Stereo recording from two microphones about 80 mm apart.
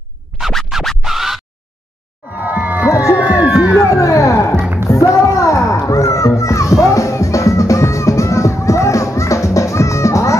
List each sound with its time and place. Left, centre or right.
0.4 s music: centre
2.3 s music: centre
2.9 s a sound: left
3.7 s speech: left
4.8 s a sound: left
5.9 s music: left